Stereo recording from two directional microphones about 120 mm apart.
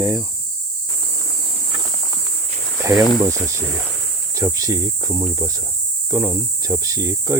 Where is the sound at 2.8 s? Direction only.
25° right (ahead or behind).